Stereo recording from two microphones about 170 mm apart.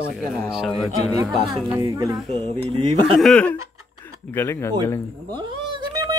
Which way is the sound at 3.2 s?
5° left (ahead or behind).